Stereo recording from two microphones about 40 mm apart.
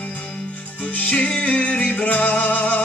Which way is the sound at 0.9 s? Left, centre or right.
Left.